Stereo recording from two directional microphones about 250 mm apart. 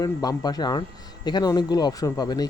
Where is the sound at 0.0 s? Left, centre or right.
Centre.